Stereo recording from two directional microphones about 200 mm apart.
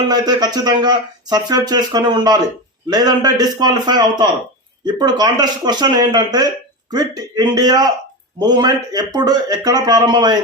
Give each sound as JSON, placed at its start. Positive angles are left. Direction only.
{"t": 0.1, "sound": "speech", "side_deg": -20}